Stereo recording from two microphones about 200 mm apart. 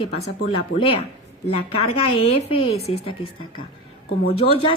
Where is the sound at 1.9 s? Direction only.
30° left (ahead or behind).